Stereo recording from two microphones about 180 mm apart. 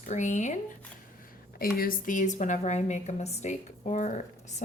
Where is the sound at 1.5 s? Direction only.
55° left (ahead or behind).